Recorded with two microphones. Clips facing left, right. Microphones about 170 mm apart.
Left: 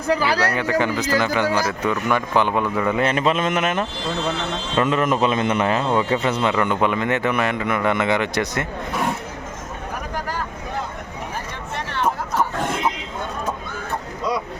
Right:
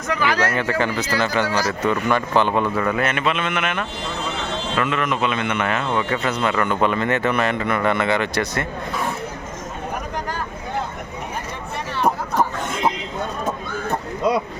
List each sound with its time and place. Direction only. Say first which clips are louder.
0.1 s a man's voice: left 2 dB; 35° left (ahead or behind)
0.3 s a man's voice: even; 15° left (ahead or behind)
3.0 s a man's voice: left 3 dB; 35° left (ahead or behind)
6.5 s a man's voice: even; 15° left (ahead or behind)